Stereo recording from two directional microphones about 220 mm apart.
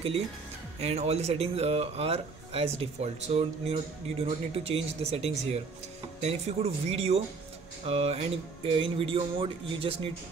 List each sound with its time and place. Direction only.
0.7 s speech: 30° right (ahead or behind)